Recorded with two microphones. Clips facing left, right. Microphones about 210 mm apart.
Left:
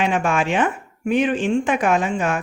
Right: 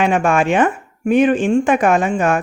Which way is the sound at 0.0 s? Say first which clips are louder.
Right 5 dB; 50° right (ahead or behind).